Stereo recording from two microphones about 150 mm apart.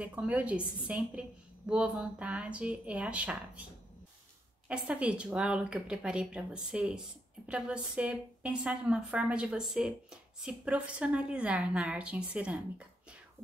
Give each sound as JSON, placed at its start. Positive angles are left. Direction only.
{"t": 0.0, "sound": "a woman's voice", "side_deg": -10}
{"t": 4.6, "sound": "a woman's voice", "side_deg": -10}